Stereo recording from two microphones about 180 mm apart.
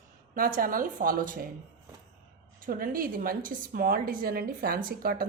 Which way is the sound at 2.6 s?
50° right (ahead or behind).